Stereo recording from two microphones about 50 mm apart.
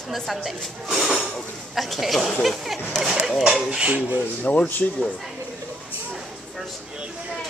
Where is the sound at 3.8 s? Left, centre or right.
Right.